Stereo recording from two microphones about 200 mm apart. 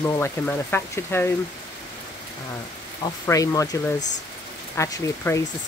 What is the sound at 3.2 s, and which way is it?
Speech, 15° left (ahead or behind).